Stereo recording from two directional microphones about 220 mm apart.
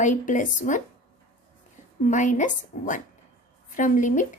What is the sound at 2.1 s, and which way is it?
A woman's voice, 35° left (ahead or behind).